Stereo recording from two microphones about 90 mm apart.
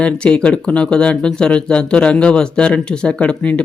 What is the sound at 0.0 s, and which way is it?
Speech, 10° left (ahead or behind).